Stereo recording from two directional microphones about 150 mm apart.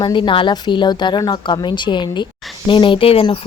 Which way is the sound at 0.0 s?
35° left (ahead or behind).